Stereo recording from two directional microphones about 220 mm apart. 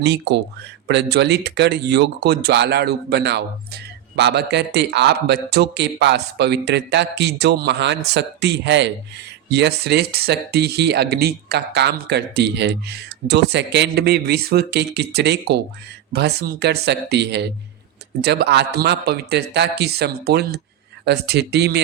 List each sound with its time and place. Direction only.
0.0 s speech: 50° right (ahead or behind)